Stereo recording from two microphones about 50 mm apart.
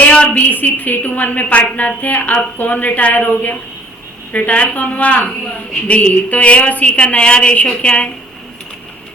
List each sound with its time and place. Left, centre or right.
0.1 s a woman's voice: left
6.3 s a woman's voice: left